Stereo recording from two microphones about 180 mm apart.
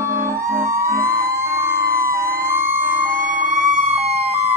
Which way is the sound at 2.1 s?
15° right (ahead or behind).